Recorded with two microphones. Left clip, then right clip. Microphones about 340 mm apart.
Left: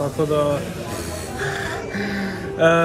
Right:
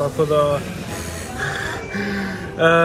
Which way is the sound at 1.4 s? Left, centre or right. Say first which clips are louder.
Right 1 dB; centre.